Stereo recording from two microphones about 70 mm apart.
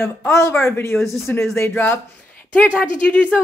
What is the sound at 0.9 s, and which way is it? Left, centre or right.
Speech, centre.